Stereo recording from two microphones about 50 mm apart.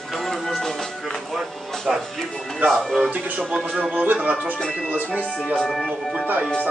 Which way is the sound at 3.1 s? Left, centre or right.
Right.